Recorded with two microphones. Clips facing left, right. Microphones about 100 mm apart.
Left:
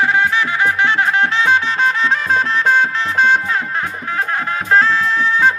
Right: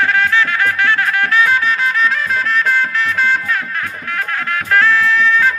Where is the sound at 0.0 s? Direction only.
15° left (ahead or behind).